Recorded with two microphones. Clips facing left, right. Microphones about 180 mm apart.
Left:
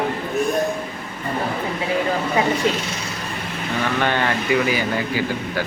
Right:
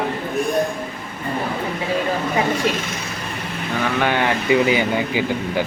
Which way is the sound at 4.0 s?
10° right (ahead or behind).